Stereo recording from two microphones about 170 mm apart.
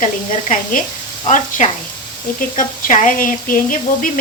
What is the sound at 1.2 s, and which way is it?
Speech, 45° left (ahead or behind).